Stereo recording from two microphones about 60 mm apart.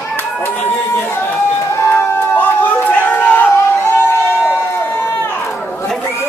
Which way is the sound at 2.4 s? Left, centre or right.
Left.